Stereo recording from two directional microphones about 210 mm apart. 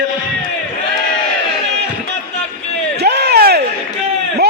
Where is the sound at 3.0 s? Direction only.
50° right (ahead or behind).